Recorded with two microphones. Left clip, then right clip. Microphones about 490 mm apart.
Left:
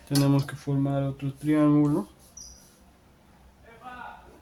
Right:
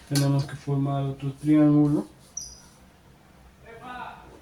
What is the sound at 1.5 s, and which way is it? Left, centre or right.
Speech, left.